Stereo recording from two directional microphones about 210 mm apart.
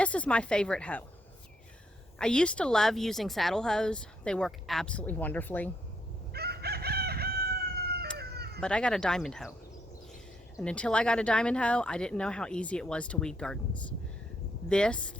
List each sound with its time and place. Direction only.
0.0 s speech: 5° left (ahead or behind)
2.1 s speech: 5° left (ahead or behind)
6.3 s chicken: 50° right (ahead or behind)
8.2 s cat: 50° right (ahead or behind)
8.6 s speech: 5° left (ahead or behind)
10.6 s speech: 5° left (ahead or behind)
14.7 s speech: 5° left (ahead or behind)